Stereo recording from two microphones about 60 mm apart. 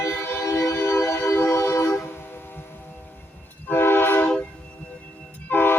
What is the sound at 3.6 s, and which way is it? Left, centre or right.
Train, left.